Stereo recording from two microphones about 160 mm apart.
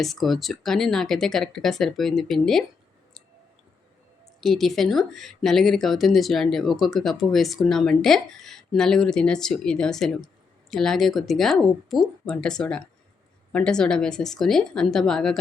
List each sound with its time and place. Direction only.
0.0 s speech: centre (ahead or behind)
4.4 s speech: centre (ahead or behind)